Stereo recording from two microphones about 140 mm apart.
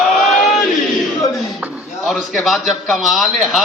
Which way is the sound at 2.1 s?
Centre (ahead or behind).